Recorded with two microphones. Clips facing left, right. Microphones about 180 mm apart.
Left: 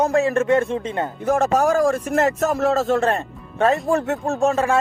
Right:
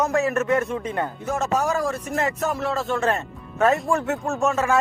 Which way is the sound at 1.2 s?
50° left (ahead or behind).